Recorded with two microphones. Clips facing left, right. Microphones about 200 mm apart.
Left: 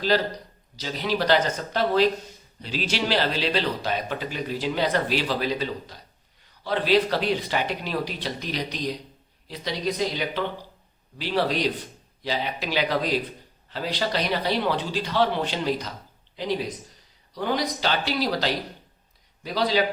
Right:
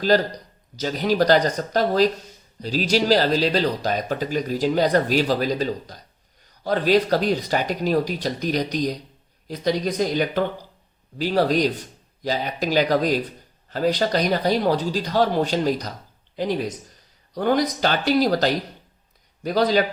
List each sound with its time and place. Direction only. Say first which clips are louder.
0.1 s a man's voice: right 4 dB; 45° right (ahead or behind)